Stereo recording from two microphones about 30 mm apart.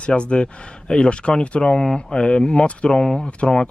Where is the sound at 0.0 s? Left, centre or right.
Left.